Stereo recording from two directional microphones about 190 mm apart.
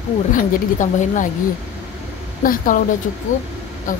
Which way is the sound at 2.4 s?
45° left (ahead or behind).